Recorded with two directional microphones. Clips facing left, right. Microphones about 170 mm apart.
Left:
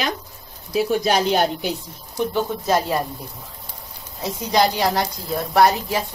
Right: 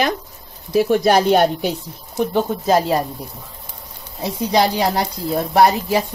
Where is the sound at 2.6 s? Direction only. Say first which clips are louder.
Right 4 dB; 35° right (ahead or behind).